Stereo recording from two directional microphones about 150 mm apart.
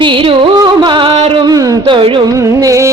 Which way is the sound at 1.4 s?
25° right (ahead or behind).